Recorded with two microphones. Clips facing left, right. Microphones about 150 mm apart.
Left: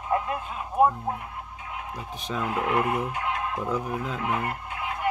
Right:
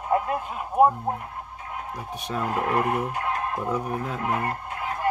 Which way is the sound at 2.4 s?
40° right (ahead or behind).